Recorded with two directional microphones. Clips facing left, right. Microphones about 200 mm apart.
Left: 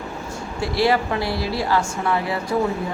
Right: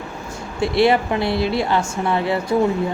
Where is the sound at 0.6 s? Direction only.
25° right (ahead or behind).